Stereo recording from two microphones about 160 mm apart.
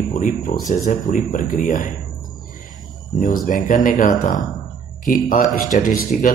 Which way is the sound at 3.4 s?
55° left (ahead or behind).